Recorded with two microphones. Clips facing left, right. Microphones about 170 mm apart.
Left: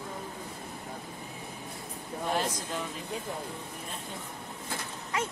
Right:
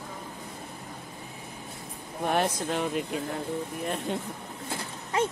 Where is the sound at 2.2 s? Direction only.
65° right (ahead or behind).